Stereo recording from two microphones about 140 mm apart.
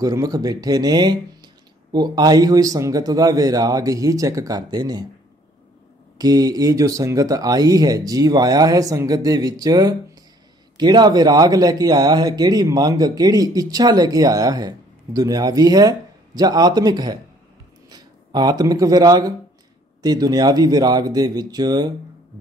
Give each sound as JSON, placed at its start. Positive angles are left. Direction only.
{"t": 0.0, "sound": "a man's voice", "side_deg": -25}
{"t": 6.1, "sound": "a man's voice", "side_deg": -30}